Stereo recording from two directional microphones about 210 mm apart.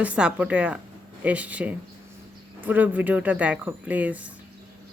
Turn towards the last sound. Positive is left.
turn(degrees=-5)  # may be behind; listen again after turning